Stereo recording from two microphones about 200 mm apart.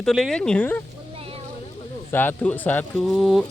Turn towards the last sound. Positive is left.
turn(degrees=0)  # may be behind; listen again after turning